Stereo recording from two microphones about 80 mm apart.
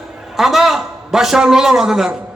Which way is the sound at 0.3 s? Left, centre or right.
Centre.